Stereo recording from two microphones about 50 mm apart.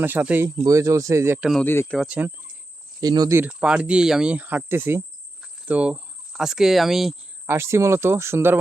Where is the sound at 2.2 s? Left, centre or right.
Right.